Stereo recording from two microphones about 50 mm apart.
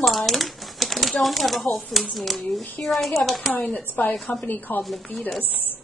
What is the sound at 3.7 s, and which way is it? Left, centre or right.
Speech, left.